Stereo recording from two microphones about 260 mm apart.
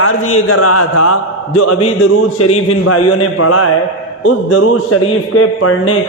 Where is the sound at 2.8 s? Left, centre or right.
Left.